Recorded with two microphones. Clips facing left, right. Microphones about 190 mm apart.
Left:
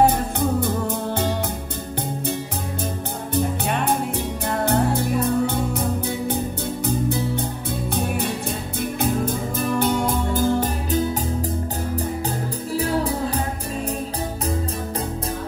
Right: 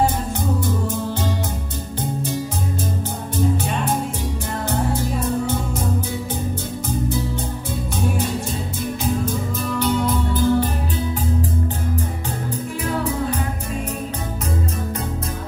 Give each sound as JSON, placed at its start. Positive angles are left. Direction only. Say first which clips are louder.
{"t": 0.0, "sound": "music", "louder": "left 3 dB", "side_deg": 55}
{"t": 3.3, "sound": "music", "louder": "right 1 dB", "side_deg": 60}
{"t": 6.9, "sound": "music", "louder": "even", "side_deg": 60}
{"t": 9.0, "sound": "music", "louder": "left 1 dB", "side_deg": 55}
{"t": 12.7, "sound": "music", "louder": "left 2 dB", "side_deg": 35}